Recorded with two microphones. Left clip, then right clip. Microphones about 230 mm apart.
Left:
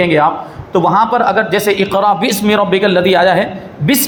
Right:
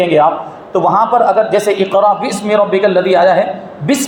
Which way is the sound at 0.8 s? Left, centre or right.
Left.